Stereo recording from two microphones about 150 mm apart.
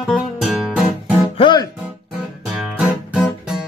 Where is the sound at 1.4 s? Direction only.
30° left (ahead or behind).